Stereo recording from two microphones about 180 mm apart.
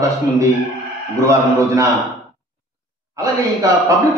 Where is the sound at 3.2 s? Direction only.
20° right (ahead or behind).